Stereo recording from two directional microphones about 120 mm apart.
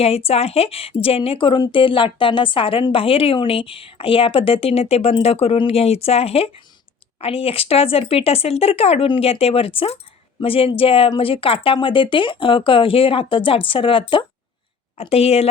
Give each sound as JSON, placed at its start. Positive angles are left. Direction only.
{"t": 0.3, "sound": "a woman's voice", "side_deg": 55}
{"t": 15.1, "sound": "speech", "side_deg": 60}